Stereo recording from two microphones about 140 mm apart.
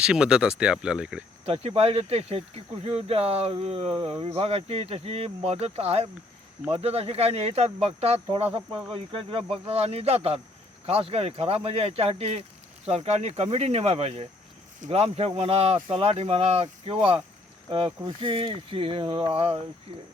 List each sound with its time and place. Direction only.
0.0 s speech: 5° right (ahead or behind)
1.5 s speech: 45° right (ahead or behind)